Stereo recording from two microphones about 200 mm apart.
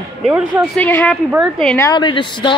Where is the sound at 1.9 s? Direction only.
25° left (ahead or behind).